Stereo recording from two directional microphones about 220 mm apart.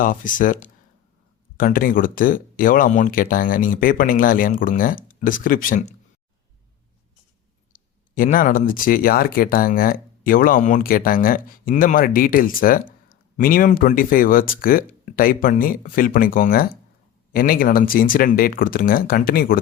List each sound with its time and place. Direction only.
0.0 s speech: 35° left (ahead or behind)
7.7 s speech: 40° left (ahead or behind)